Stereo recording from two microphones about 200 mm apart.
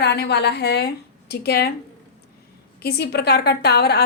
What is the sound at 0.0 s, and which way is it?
A woman's voice, 55° left (ahead or behind).